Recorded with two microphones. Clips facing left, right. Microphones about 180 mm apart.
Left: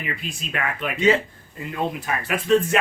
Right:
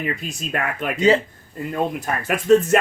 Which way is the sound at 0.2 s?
45° right (ahead or behind).